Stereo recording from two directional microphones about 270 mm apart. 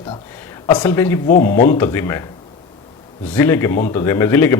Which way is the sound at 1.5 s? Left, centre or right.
Left.